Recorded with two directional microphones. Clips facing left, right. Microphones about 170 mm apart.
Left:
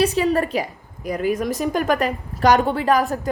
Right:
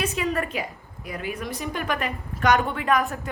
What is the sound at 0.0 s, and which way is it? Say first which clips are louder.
A woman's voice: left 8 dB; 35° left (ahead or behind).